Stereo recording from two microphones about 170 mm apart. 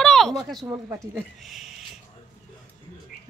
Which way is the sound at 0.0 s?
Centre (ahead or behind).